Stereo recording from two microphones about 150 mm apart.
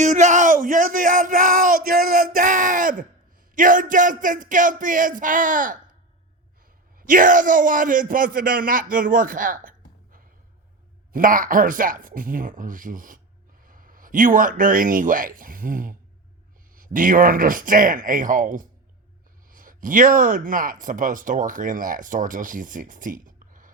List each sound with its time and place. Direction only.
0.0 s a sound: 55° right (ahead or behind)
3.5 s speech: 60° right (ahead or behind)
7.1 s speech: 60° right (ahead or behind)